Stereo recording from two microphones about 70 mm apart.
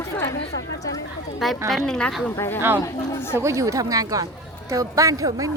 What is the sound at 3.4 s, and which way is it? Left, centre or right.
Speech, right.